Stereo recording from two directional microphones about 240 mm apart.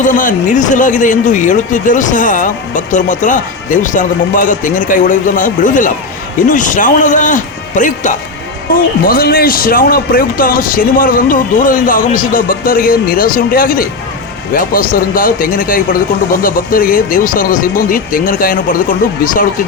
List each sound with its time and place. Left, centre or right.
0.0 s speech: left